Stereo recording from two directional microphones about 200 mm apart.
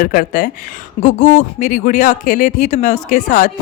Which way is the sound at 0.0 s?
45° left (ahead or behind).